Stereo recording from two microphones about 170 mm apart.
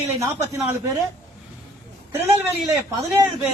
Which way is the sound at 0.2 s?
15° right (ahead or behind).